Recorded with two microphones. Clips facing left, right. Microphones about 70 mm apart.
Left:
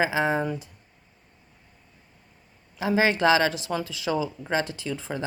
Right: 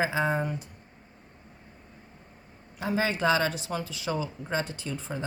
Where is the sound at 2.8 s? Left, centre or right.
Left.